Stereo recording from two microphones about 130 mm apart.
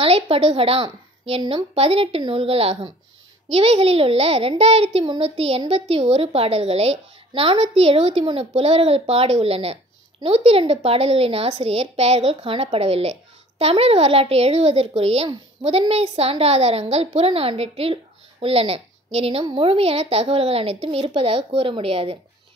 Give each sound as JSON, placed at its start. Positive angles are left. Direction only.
{"t": 0.0, "sound": "a woman's voice", "side_deg": -45}